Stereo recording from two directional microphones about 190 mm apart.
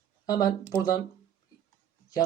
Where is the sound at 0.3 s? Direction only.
20° left (ahead or behind).